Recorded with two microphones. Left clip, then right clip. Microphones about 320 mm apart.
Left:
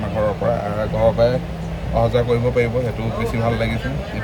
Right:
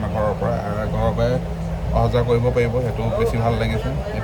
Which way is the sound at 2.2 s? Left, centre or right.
Centre.